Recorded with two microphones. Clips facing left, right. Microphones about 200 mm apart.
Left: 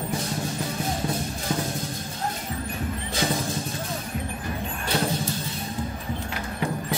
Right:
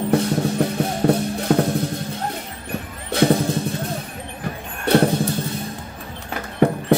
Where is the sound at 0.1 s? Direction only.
65° right (ahead or behind).